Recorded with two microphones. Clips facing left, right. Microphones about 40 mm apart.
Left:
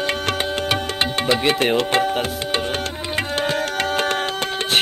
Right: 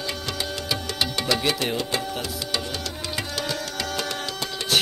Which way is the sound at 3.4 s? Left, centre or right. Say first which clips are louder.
Left 8 dB; left.